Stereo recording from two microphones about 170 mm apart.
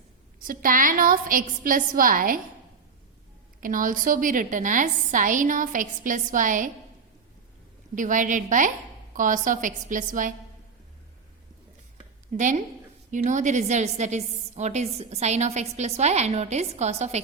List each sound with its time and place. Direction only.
0.4 s a woman's voice: 55° right (ahead or behind)
3.6 s a woman's voice: 50° right (ahead or behind)
7.9 s a woman's voice: 50° right (ahead or behind)
12.4 s a woman's voice: 45° right (ahead or behind)